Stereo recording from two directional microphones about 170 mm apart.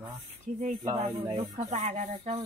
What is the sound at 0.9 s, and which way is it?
Speech, 40° right (ahead or behind).